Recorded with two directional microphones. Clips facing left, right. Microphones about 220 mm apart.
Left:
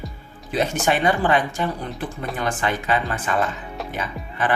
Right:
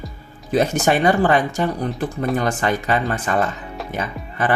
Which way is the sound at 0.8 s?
40° right (ahead or behind).